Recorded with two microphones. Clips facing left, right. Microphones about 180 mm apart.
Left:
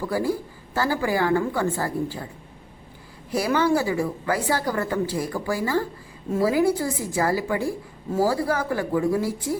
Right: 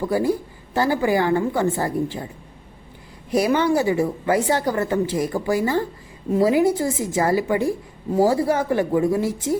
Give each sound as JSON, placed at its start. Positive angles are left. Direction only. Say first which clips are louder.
{"t": 0.0, "sound": "speech", "louder": "right 4 dB", "side_deg": -20}
{"t": 3.2, "sound": "speech", "louder": "right 3 dB", "side_deg": -20}